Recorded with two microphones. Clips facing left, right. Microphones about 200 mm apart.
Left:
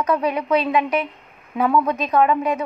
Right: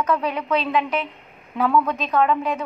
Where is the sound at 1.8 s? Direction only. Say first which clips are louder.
Left 2 dB; 15° left (ahead or behind).